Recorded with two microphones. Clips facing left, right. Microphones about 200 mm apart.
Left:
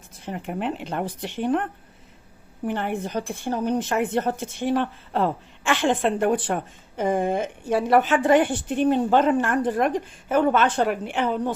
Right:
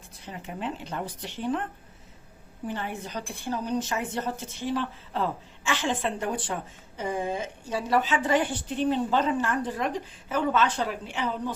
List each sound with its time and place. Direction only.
0.3 s a woman's voice: 55° left (ahead or behind)
2.6 s a woman's voice: 60° left (ahead or behind)